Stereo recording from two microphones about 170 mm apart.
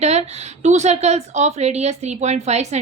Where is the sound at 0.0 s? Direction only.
40° right (ahead or behind).